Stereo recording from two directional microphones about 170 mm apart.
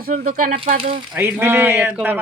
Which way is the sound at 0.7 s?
35° right (ahead or behind).